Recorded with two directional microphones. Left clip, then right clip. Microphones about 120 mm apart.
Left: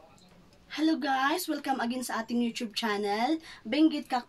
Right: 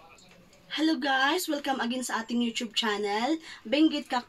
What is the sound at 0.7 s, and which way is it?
A woman's voice, 45° left (ahead or behind).